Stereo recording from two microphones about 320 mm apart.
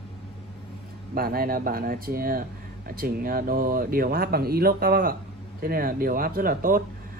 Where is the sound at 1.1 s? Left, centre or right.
Right.